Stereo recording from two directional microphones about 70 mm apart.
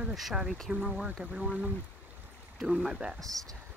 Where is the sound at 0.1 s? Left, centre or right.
Centre.